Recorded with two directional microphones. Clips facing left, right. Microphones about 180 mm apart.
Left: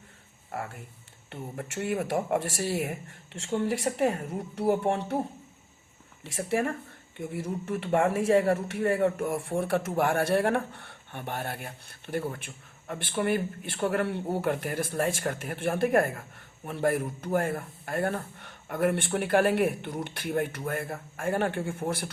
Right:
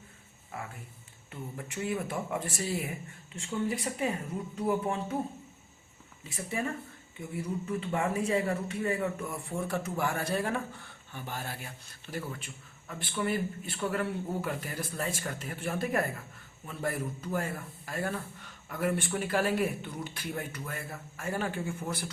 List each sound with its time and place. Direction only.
1.6 s a man's voice: 70° left (ahead or behind)
4.9 s a man's voice: 75° left (ahead or behind)
6.2 s speech: 85° left
7.3 s a man's voice: 85° left; by 22.1 s 60° left (ahead or behind)